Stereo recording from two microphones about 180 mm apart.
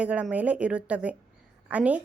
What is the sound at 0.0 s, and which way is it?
A woman's voice, 5° right (ahead or behind).